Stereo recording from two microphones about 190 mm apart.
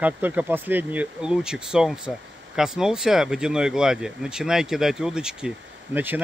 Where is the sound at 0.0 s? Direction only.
10° right (ahead or behind).